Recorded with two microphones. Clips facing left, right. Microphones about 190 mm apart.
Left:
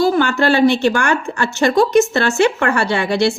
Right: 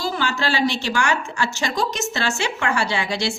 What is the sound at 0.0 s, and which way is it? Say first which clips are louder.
A woman's voice: left 10 dB; 55° left (ahead or behind).